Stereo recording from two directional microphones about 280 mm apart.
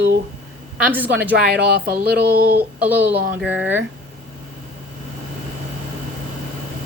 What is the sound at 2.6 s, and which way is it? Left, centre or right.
Speech, centre.